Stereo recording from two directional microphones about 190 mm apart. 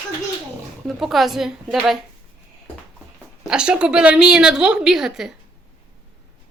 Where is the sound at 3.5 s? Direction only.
5° right (ahead or behind).